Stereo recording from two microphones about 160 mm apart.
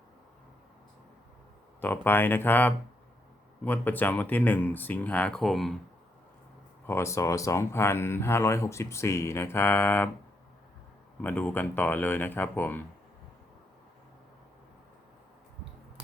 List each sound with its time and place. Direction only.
1.8 s speech: 10° left (ahead or behind)
6.8 s speech: 15° left (ahead or behind)
11.2 s speech: 10° left (ahead or behind)